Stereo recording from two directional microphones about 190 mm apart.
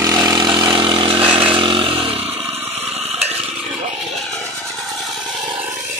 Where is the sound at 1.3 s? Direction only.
25° right (ahead or behind).